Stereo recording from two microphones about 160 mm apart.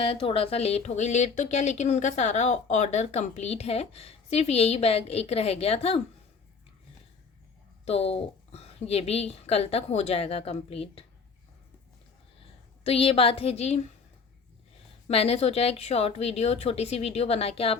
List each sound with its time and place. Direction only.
0.0 s speech: 35° left (ahead or behind)
7.9 s speech: 40° left (ahead or behind)
12.8 s speech: 40° left (ahead or behind)
15.0 s speech: 40° left (ahead or behind)